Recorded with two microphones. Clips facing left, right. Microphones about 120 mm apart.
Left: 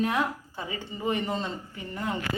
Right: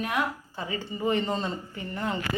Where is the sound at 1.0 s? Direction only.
15° left (ahead or behind).